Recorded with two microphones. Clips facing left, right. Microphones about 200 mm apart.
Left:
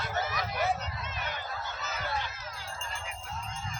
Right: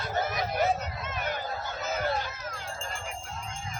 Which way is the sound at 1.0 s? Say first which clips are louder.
Right 8 dB; 50° right (ahead or behind).